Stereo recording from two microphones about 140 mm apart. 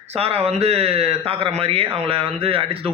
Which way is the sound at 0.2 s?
45° right (ahead or behind).